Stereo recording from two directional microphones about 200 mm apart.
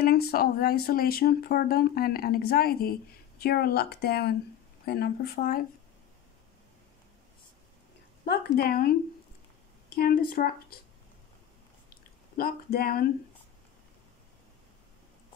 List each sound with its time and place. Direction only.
0.0 s speech: 50° left (ahead or behind)
8.3 s speech: 50° left (ahead or behind)
9.9 s speech: 45° left (ahead or behind)
12.4 s speech: 50° left (ahead or behind)